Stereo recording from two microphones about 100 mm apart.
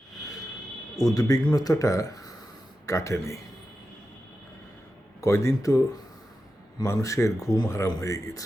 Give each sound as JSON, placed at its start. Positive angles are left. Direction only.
{"t": 0.9, "sound": "speech", "side_deg": 35}
{"t": 5.2, "sound": "speech", "side_deg": 30}
{"t": 6.8, "sound": "speech", "side_deg": 35}